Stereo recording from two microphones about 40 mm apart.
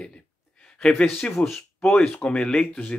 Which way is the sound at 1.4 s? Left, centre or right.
Left.